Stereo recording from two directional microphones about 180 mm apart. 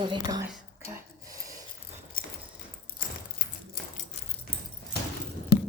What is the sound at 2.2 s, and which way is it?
Clip-clop, 50° left (ahead or behind).